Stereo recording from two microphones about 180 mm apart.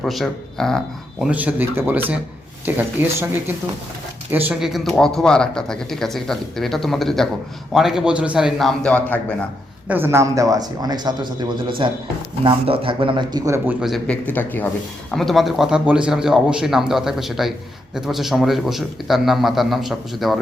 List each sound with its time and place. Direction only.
0.0 s speech: centre (ahead or behind)
9.9 s speech: 15° right (ahead or behind)
13.8 s speech: 5° left (ahead or behind)